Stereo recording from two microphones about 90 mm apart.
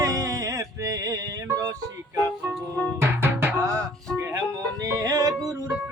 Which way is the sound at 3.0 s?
25° right (ahead or behind).